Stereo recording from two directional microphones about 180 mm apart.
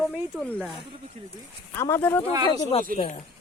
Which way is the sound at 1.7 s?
15° left (ahead or behind).